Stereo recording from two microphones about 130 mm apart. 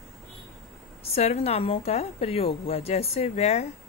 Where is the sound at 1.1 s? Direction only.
50° left (ahead or behind).